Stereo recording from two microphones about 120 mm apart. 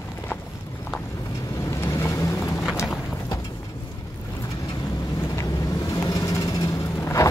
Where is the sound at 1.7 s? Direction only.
25° left (ahead or behind).